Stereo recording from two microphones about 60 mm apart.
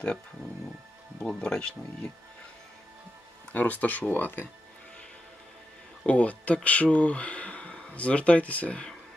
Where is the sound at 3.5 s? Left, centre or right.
Left.